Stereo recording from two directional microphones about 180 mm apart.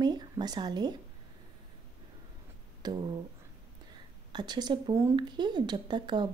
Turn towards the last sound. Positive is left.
turn(degrees=-25)  # may be behind; listen again after turning